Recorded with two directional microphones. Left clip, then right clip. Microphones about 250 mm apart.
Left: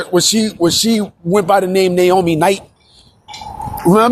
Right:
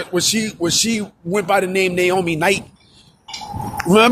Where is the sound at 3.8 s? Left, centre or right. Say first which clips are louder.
Left 2 dB; left.